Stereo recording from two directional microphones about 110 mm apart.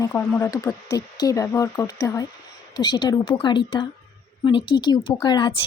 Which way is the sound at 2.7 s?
40° left (ahead or behind).